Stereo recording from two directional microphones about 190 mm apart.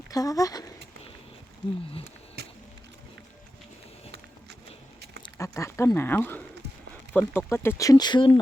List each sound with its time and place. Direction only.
0.1 s speech: 20° left (ahead or behind)
5.2 s speech: 15° left (ahead or behind)